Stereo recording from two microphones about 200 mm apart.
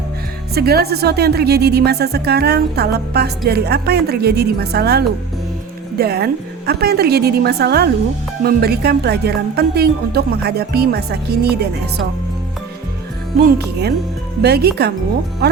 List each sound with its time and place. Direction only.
0.5 s a woman's voice: 50° right (ahead or behind)
13.6 s speech: 55° right (ahead or behind)